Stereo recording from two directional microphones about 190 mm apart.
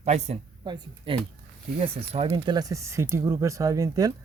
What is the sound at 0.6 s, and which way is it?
Speech, 25° right (ahead or behind).